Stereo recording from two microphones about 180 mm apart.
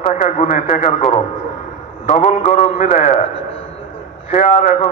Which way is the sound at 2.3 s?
40° left (ahead or behind).